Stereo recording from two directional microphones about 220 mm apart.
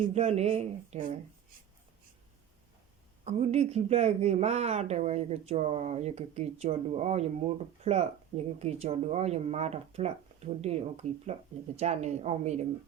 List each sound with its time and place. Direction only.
0.1 s speech: 30° right (ahead or behind)
3.2 s a woman's voice: 30° right (ahead or behind)